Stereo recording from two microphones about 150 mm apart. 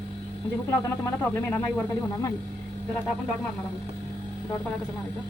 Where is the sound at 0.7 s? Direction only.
15° left (ahead or behind).